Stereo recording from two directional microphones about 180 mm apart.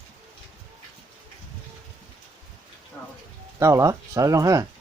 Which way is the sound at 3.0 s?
10° left (ahead or behind).